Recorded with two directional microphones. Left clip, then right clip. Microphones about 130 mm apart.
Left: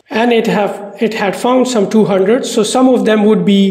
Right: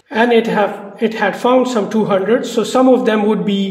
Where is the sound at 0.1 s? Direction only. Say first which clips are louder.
Left 1 dB; 45° left (ahead or behind).